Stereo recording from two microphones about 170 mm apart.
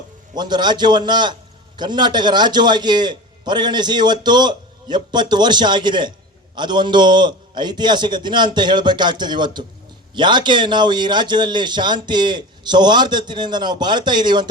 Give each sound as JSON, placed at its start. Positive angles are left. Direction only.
{"t": 0.3, "sound": "a man's voice", "side_deg": -25}